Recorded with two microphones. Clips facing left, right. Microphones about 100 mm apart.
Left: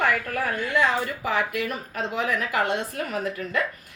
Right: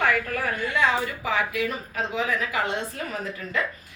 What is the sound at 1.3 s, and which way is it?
A woman's voice, 55° left (ahead or behind).